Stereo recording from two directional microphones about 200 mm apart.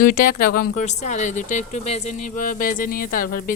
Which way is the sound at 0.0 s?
45° left (ahead or behind).